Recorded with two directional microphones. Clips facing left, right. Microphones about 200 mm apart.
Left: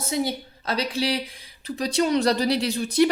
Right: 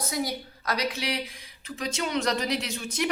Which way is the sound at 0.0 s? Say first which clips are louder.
Left 4 dB; 25° left (ahead or behind).